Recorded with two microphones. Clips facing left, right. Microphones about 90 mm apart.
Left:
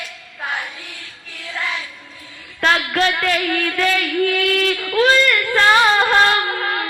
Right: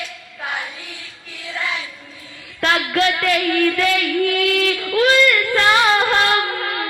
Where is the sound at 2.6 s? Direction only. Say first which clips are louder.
Left 1 dB; 40° left (ahead or behind).